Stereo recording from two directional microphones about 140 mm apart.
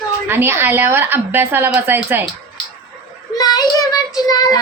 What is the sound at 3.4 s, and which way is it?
Child singing, 30° left (ahead or behind).